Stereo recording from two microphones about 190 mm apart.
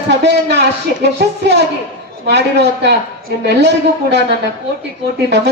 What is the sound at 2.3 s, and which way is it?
A man's voice, 65° right (ahead or behind).